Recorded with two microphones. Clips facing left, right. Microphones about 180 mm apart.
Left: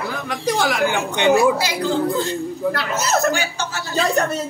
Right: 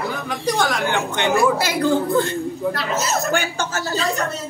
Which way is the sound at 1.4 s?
55° right (ahead or behind).